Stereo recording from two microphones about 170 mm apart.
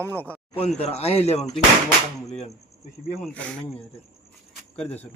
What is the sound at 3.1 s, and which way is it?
Speech, 10° left (ahead or behind).